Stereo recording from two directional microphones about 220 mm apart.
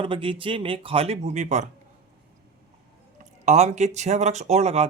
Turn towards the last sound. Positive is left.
turn(degrees=-30)  # may be behind; listen again after turning